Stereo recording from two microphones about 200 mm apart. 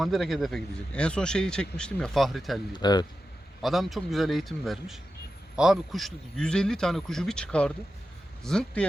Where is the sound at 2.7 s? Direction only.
20° left (ahead or behind).